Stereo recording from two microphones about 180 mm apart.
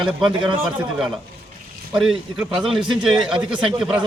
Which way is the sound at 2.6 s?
Centre (ahead or behind).